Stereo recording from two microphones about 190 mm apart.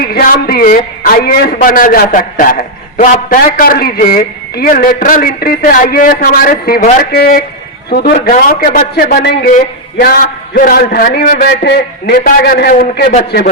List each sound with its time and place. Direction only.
0.0 s a man's voice: 50° left (ahead or behind)